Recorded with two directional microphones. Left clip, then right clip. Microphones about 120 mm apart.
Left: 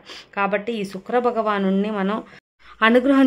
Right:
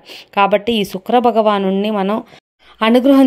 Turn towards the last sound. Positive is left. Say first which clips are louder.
# right 5 dB
turn(degrees=-35)  # may be behind; listen again after turning